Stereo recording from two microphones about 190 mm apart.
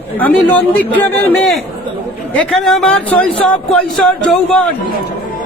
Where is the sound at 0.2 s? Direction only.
10° left (ahead or behind).